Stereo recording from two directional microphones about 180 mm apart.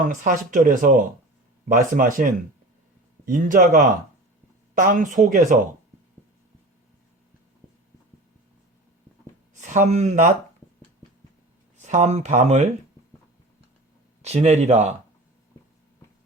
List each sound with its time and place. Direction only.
0.0 s speech: 50° right (ahead or behind)
9.6 s speech: 40° right (ahead or behind)
11.8 s speech: 40° right (ahead or behind)
14.2 s speech: 35° right (ahead or behind)